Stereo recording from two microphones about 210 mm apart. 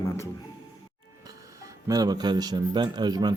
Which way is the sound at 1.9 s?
20° right (ahead or behind).